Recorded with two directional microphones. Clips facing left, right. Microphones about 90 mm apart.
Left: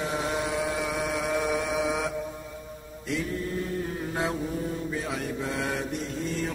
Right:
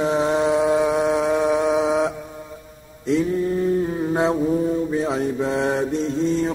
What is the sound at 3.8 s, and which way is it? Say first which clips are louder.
Mantra: right 10 dB; 30° right (ahead or behind).